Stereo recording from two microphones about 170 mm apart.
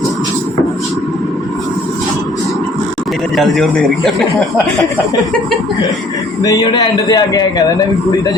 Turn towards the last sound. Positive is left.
turn(degrees=20)  # may be behind; listen again after turning